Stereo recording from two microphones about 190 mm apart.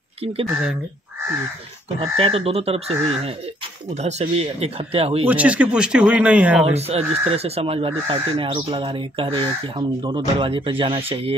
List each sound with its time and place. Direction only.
2.0 s speech: 30° right (ahead or behind)
5.2 s speech: 5° right (ahead or behind)
6.6 s speech: 35° right (ahead or behind)